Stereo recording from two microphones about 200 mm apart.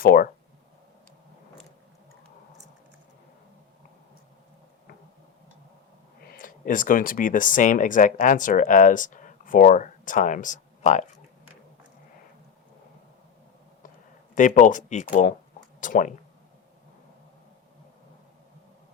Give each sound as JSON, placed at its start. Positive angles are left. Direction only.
{"t": 0.0, "sound": "speech", "side_deg": 45}
{"t": 6.2, "sound": "speech", "side_deg": 45}
{"t": 14.3, "sound": "speech", "side_deg": 40}